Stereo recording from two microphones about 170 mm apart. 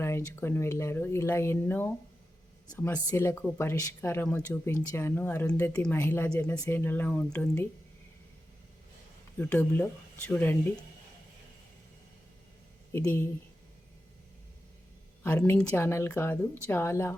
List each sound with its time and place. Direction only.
0.0 s speech: 15° left (ahead or behind)
9.4 s speech: 10° left (ahead or behind)
12.9 s speech: 15° left (ahead or behind)
15.2 s speech: 15° left (ahead or behind)